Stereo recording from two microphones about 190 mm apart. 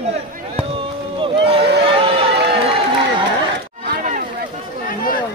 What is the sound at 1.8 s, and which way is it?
Chatter, 30° right (ahead or behind).